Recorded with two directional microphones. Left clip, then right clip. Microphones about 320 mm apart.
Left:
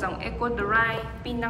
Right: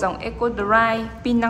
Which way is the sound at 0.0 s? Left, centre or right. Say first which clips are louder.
Right 6 dB; centre.